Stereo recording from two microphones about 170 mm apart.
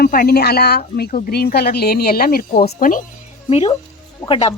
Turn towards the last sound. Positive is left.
turn(degrees=15)  # may be behind; listen again after turning